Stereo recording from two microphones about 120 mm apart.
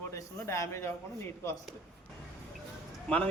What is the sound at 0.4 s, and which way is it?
Speech, 25° left (ahead or behind).